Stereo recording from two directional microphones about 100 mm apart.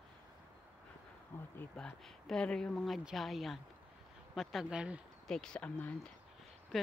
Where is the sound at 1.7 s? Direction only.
10° left (ahead or behind).